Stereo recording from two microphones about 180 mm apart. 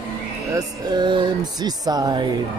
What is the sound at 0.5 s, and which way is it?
Speech, 25° right (ahead or behind).